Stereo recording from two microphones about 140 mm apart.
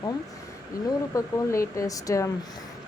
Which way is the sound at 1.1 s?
20° left (ahead or behind).